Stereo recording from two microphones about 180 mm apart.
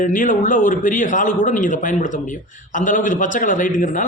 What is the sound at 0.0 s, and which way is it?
A man's voice, 45° left (ahead or behind).